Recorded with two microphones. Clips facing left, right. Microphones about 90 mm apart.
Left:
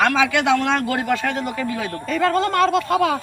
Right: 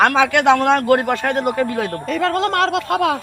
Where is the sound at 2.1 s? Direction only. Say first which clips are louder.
Left 1 dB; 70° right (ahead or behind).